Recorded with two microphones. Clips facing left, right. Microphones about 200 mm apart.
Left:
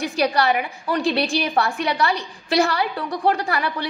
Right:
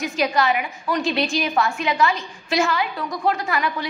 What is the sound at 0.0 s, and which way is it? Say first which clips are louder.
A woman's voice: left 1 dB; 35° left (ahead or behind).